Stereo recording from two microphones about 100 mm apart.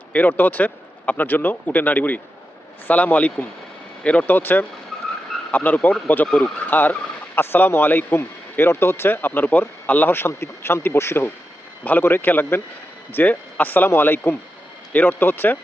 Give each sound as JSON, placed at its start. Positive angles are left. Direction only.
{"t": 0.1, "sound": "speech", "side_deg": 20}